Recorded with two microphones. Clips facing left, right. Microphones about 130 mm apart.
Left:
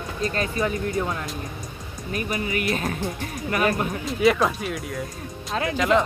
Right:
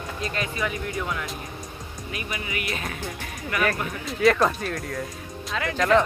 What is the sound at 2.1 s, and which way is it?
Speech, 45° left (ahead or behind).